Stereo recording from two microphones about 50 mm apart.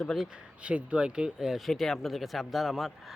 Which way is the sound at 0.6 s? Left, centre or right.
Right.